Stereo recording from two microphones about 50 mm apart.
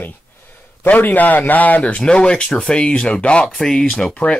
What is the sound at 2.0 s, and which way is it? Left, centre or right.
Speech, centre.